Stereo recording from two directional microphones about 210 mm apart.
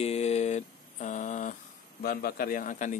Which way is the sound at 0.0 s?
30° left (ahead or behind).